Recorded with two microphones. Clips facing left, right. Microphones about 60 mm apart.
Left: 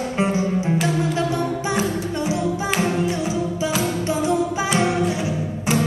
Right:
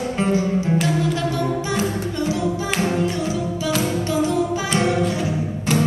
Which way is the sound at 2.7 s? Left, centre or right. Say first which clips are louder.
Even; centre.